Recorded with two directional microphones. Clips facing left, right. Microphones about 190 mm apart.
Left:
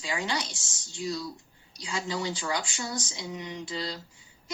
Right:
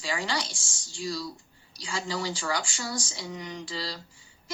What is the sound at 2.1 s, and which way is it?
A woman's voice, 20° left (ahead or behind).